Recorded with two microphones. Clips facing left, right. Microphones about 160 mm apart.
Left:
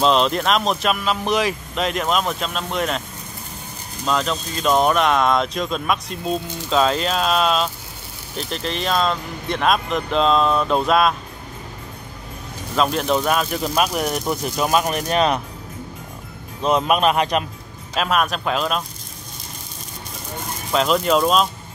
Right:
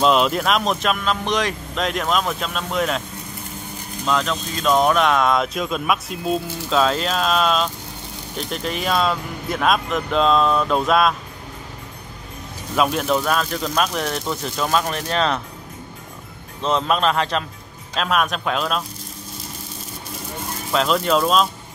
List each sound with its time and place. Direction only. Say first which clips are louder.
0.0 s speech: even; 5° right (ahead or behind)
4.0 s speech: even; centre (ahead or behind)
12.7 s speech: even; 5° right (ahead or behind); by 15.4 s 15° left (ahead or behind)
16.6 s speech: left 2 dB; 15° left (ahead or behind)
17.9 s speech: left 1 dB; centre (ahead or behind)
20.7 s speech: left 1 dB; centre (ahead or behind)